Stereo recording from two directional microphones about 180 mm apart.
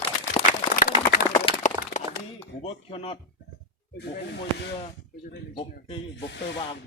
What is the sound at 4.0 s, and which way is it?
Speech, 70° left (ahead or behind).